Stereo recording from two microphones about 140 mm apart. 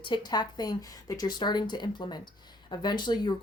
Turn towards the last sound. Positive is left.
turn(degrees=30)  # may be behind; listen again after turning